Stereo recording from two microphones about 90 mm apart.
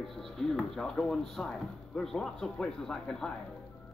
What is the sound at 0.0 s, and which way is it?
Speech, centre (ahead or behind).